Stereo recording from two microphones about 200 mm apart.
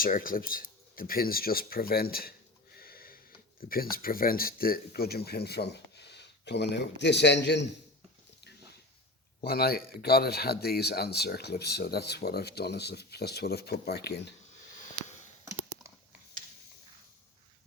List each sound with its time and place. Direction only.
0.0 s speech: 45° left (ahead or behind)
2.7 s a sound: 50° left (ahead or behind)
3.6 s speech: 45° left (ahead or behind)
9.4 s speech: 50° left (ahead or behind)